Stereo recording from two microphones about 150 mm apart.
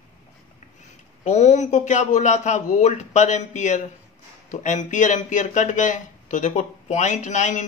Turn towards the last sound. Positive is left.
turn(degrees=55)  # may be behind; listen again after turning